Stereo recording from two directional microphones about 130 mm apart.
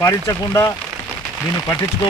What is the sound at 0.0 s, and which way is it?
Speech, 25° left (ahead or behind).